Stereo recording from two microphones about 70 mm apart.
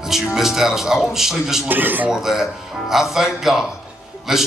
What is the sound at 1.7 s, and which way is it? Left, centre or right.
Speech, right.